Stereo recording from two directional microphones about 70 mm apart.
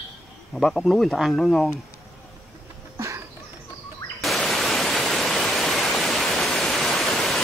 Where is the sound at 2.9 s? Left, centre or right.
Right.